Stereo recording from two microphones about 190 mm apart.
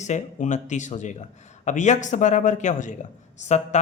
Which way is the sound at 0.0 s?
40° left (ahead or behind).